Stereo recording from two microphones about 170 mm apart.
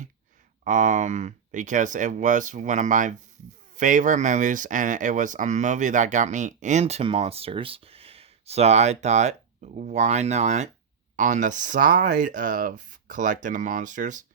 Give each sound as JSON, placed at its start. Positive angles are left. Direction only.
{"t": 0.6, "sound": "speech", "side_deg": -45}